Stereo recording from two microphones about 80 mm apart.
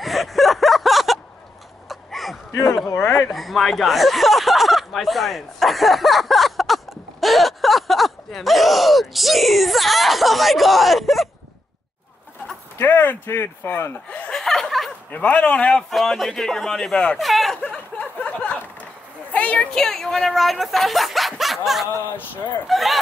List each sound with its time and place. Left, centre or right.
0.0 s a sound: centre
3.2 s speech: centre
12.7 s speech: left
14.3 s chuckle: centre
15.0 s speech: centre
15.9 s speech: centre
17.2 s a sound: centre
17.6 s a sound: centre
19.7 s speech: centre